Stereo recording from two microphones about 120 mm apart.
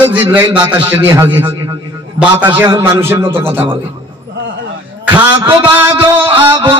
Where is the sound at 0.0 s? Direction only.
15° right (ahead or behind).